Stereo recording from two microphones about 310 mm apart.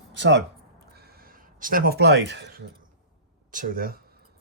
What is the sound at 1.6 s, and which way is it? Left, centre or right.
Speech, right.